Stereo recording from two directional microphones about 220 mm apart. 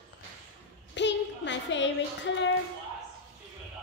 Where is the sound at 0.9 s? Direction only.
55° left (ahead or behind).